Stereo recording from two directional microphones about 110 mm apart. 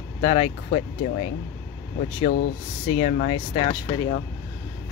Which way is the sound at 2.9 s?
75° left (ahead or behind).